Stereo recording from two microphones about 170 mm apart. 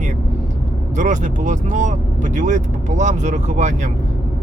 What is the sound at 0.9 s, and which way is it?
Speech, 45° right (ahead or behind).